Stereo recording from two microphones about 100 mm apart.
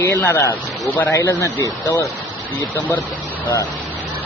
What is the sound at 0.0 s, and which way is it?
Speech, 30° left (ahead or behind).